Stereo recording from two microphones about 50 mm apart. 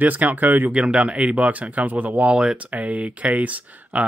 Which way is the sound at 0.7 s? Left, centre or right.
Right.